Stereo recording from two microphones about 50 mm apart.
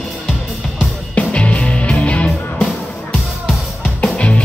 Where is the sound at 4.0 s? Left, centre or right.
Left.